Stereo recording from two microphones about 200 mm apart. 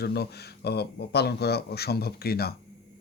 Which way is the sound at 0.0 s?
55° left (ahead or behind).